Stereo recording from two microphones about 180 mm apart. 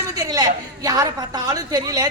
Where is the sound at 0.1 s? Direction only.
20° right (ahead or behind).